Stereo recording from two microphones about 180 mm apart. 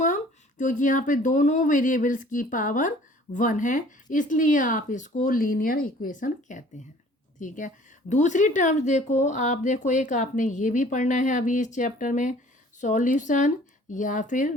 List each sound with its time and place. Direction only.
0.6 s speech: 45° left (ahead or behind)